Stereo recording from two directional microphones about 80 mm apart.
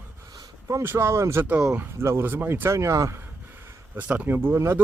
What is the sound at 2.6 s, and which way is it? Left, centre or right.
Speech, right.